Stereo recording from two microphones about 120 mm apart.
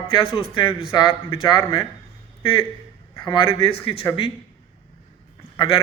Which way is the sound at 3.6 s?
50° left (ahead or behind).